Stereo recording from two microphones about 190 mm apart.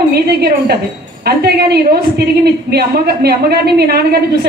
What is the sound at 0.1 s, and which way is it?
A woman's voice, 55° right (ahead or behind).